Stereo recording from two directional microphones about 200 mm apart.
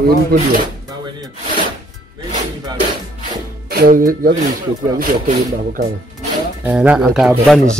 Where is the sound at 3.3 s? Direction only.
50° right (ahead or behind).